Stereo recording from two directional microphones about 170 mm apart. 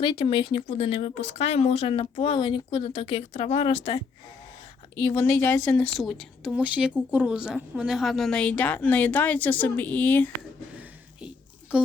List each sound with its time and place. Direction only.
0.0 s speech: 30° left (ahead or behind)
4.9 s a woman's voice: 15° left (ahead or behind)
11.7 s speech: 5° right (ahead or behind)